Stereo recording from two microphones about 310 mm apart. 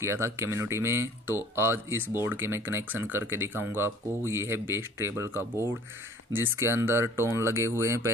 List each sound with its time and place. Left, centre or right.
0.0 s speech: centre